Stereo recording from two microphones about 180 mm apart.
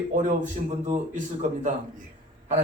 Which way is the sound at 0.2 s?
45° right (ahead or behind).